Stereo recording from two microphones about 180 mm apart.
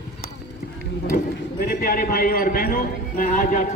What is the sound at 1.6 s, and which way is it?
A man's voice, 50° left (ahead or behind).